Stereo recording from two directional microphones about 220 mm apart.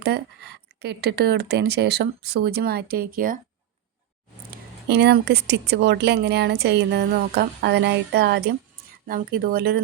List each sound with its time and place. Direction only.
0.8 s speech: 45° right (ahead or behind)
4.5 s speech: 50° right (ahead or behind)